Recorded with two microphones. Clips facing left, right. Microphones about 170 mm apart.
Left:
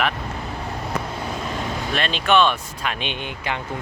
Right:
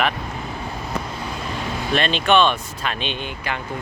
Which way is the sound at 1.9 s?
5° left (ahead or behind).